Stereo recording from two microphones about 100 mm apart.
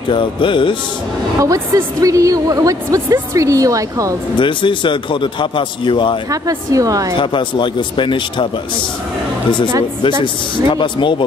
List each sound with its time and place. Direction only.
0.1 s a man's voice: 55° left (ahead or behind)
1.4 s a woman's voice: 30° right (ahead or behind)
4.4 s a man's voice: 55° left (ahead or behind)
6.3 s a woman's voice: 35° right (ahead or behind)
7.2 s speech: 55° left (ahead or behind)
10.0 s a man's voice: 55° left (ahead or behind)